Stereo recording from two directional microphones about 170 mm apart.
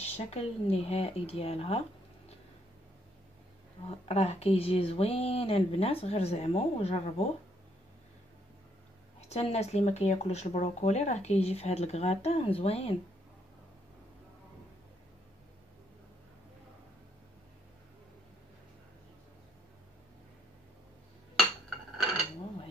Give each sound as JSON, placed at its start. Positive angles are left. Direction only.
{"t": 0.0, "sound": "speech", "side_deg": 40}
{"t": 4.1, "sound": "speech", "side_deg": 40}
{"t": 9.3, "sound": "speech", "side_deg": 40}
{"t": 21.9, "sound": "cutlery", "side_deg": 0}